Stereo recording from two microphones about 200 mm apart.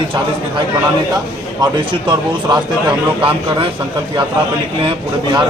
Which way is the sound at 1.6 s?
20° right (ahead or behind).